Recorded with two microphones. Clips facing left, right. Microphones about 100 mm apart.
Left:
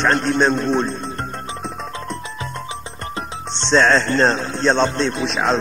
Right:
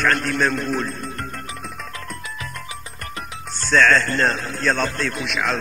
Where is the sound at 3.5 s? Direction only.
25° left (ahead or behind).